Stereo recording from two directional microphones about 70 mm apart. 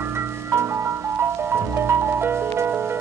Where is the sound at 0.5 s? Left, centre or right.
Right.